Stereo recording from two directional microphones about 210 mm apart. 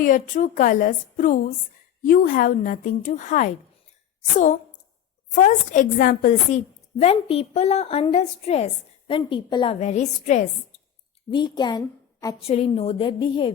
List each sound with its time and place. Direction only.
0.0 s a woman's voice: 40° left (ahead or behind)
5.3 s a woman's voice: 35° left (ahead or behind)
7.0 s a woman's voice: 30° left (ahead or behind)
11.3 s a woman's voice: 20° left (ahead or behind)